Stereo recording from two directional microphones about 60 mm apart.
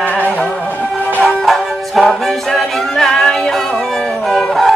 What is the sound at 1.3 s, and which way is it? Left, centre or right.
Music, centre.